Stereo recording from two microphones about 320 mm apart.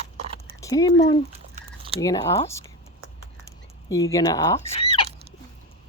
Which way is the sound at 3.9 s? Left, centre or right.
Centre.